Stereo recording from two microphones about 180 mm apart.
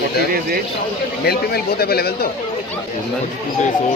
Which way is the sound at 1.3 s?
60° left (ahead or behind).